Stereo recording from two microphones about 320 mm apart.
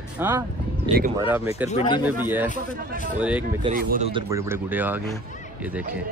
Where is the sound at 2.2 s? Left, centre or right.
Centre.